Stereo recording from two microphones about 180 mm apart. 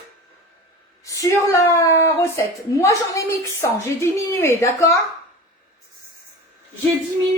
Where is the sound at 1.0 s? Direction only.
15° left (ahead or behind).